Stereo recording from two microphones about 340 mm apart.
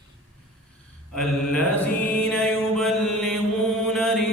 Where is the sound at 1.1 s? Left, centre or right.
Centre.